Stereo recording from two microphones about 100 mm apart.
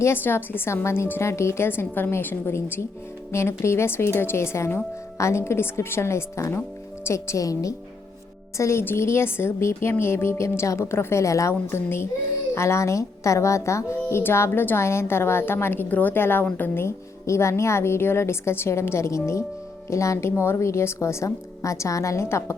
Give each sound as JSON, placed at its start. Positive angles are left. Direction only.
{"t": 0.0, "sound": "speech", "side_deg": 20}